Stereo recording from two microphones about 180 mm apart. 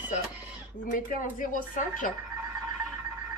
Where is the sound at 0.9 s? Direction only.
50° left (ahead or behind).